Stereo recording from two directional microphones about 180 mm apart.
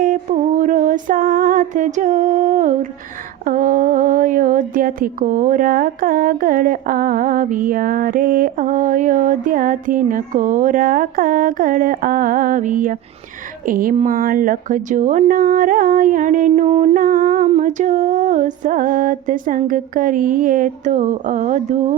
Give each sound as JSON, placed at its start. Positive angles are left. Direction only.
{"t": 0.0, "sound": "music", "side_deg": -45}
{"t": 3.4, "sound": "speech", "side_deg": -50}